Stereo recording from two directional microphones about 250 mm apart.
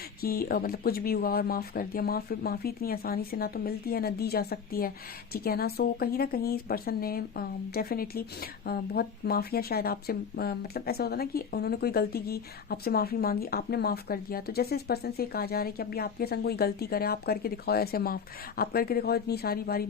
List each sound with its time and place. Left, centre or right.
0.2 s a woman's voice: left